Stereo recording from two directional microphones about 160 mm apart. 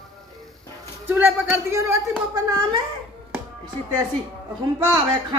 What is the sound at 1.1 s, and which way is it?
Speech, 15° right (ahead or behind).